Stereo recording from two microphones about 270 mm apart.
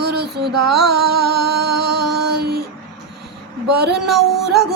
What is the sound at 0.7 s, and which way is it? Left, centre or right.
Music, right.